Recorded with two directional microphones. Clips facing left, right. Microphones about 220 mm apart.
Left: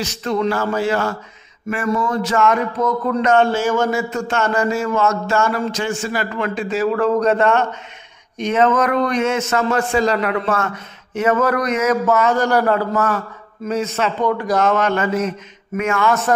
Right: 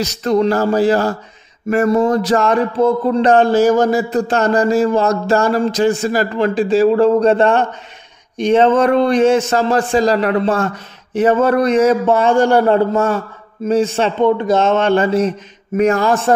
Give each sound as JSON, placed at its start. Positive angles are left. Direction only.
{"t": 0.0, "sound": "speech", "side_deg": -40}